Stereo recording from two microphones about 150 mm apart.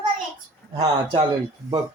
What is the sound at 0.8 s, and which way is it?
Speech, 30° right (ahead or behind).